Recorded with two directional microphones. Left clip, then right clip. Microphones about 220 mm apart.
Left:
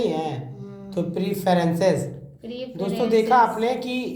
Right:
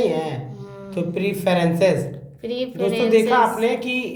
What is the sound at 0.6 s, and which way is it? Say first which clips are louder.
Music: right 3 dB; 45° right (ahead or behind).